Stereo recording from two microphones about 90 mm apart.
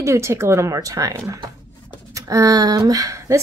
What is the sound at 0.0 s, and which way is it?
A woman's voice, 30° right (ahead or behind).